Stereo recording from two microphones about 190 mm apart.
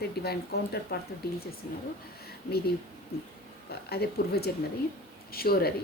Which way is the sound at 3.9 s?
55° left (ahead or behind).